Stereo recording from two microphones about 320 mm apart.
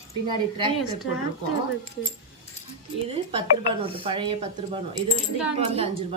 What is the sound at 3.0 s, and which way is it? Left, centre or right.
Speech, centre.